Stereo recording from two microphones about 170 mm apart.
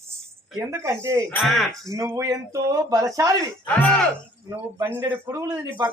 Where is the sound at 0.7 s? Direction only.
15° right (ahead or behind).